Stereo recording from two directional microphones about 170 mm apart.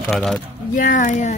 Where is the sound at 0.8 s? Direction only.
50° left (ahead or behind).